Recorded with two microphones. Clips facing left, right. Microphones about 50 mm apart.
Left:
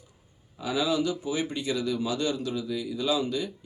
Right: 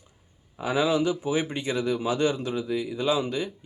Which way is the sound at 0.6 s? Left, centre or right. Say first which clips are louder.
Right 3 dB; right.